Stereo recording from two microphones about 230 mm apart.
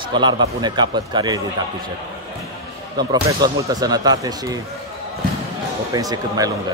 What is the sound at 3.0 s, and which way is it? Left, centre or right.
Speech, centre.